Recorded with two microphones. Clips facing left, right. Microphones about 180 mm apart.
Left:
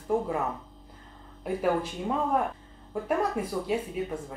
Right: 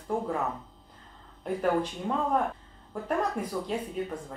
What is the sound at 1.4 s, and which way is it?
Speech, 5° left (ahead or behind).